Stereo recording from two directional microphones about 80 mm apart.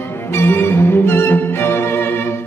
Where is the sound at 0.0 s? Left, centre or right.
Left.